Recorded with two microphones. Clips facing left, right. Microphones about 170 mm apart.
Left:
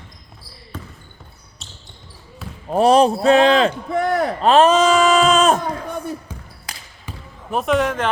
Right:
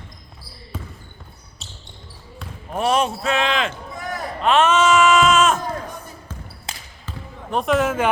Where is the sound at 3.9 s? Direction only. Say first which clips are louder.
Left 11 dB; 70° left (ahead or behind).